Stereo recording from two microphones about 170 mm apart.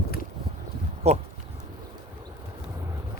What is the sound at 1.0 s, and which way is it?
Speech, 40° right (ahead or behind).